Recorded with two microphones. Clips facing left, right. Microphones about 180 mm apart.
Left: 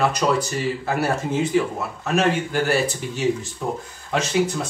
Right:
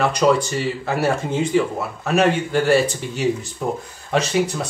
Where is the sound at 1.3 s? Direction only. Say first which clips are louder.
Right 1 dB; 5° left (ahead or behind).